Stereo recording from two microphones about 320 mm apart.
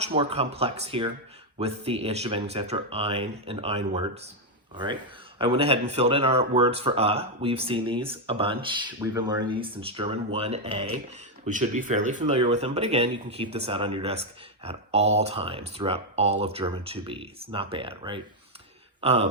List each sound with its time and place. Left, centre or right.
0.0 s speech: centre